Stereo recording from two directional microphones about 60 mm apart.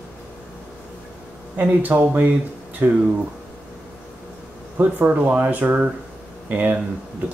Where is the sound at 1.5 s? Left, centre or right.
Right.